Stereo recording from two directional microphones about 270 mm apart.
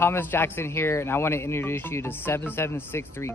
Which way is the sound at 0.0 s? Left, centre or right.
Centre.